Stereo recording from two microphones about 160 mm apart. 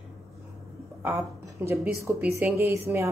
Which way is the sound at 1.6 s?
10° right (ahead or behind).